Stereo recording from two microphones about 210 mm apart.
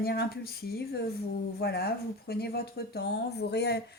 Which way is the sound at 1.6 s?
50° left (ahead or behind).